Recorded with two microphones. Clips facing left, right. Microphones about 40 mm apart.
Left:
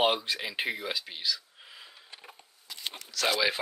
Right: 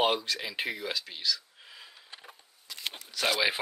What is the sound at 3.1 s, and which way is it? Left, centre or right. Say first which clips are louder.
Speech: left 1 dB; centre.